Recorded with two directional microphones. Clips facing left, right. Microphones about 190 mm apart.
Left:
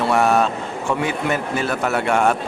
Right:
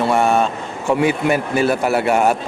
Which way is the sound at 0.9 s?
10° right (ahead or behind).